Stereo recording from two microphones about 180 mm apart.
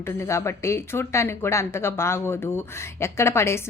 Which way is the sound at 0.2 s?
15° left (ahead or behind).